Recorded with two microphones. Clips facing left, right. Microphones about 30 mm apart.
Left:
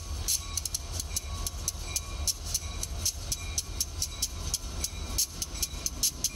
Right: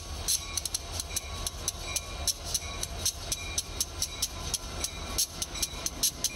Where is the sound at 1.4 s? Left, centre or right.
Right.